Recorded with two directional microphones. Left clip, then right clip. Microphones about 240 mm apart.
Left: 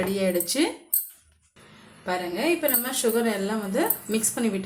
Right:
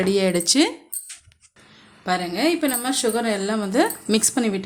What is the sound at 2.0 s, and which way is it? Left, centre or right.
A woman's voice, right.